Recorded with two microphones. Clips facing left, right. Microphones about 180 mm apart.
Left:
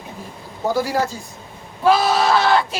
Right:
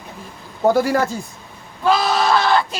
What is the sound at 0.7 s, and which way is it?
Speech, 55° right (ahead or behind).